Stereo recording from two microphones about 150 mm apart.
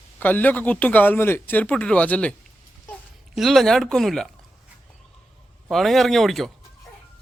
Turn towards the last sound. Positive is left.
turn(degrees=0)  # may be behind; listen again after turning